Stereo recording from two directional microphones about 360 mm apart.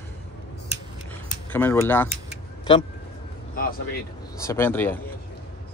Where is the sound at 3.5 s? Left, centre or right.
Left.